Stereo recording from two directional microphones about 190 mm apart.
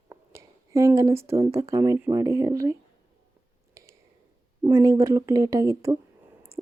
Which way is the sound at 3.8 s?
15° right (ahead or behind).